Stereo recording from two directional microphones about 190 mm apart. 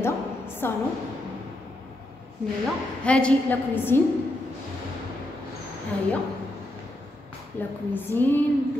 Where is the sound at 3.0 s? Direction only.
5° left (ahead or behind).